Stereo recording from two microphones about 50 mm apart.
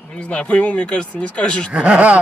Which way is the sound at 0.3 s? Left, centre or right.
Left.